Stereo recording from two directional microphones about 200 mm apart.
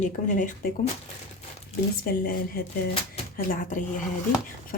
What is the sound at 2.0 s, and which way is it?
A woman's voice, 45° left (ahead or behind).